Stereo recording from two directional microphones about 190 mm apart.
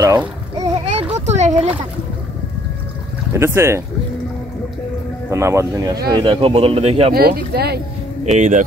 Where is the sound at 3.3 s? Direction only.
15° right (ahead or behind).